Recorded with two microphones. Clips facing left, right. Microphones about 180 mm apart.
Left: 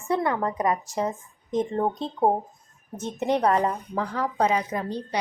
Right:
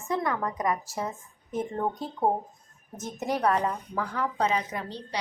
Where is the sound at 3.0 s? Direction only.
30° left (ahead or behind).